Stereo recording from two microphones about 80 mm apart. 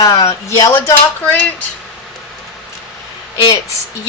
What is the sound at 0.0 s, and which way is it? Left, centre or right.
Speech, left.